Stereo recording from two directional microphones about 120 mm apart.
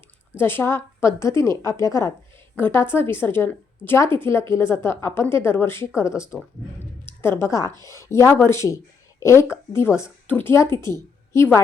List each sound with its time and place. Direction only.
0.3 s a woman's voice: 20° left (ahead or behind)